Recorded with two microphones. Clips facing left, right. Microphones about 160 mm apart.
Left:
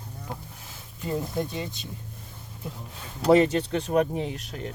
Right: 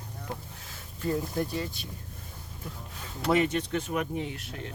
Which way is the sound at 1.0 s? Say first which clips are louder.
Even; 20° left (ahead or behind).